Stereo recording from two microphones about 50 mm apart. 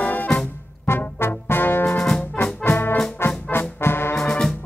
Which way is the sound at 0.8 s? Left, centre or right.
Left.